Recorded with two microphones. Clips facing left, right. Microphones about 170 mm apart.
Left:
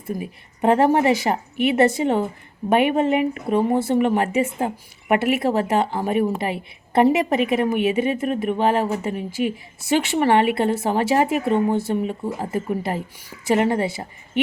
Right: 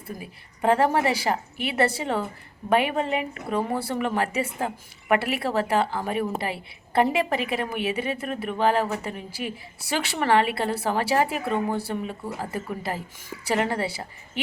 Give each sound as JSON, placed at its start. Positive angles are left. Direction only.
{"t": 0.6, "sound": "a woman's voice", "side_deg": 20}